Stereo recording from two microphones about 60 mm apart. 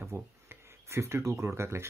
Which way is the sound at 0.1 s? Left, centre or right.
Right.